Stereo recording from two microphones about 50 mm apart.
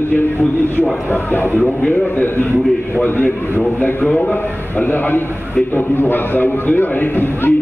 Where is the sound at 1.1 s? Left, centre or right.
Left.